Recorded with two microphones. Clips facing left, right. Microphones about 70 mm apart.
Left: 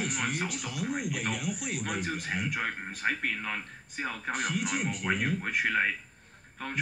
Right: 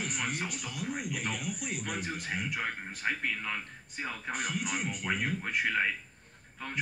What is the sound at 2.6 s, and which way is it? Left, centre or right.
Speech, centre.